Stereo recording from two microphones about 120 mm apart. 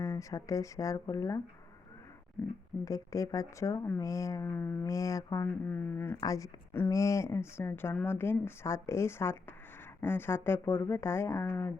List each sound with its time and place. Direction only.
0.0 s speech: 25° left (ahead or behind)
2.8 s speech: 25° left (ahead or behind)
4.9 s speech: 25° left (ahead or behind)
5.6 s speech: 15° left (ahead or behind)
6.1 s speech: 30° left (ahead or behind)